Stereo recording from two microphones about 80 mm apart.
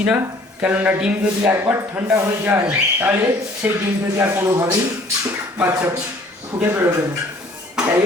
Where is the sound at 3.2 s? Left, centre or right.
Right.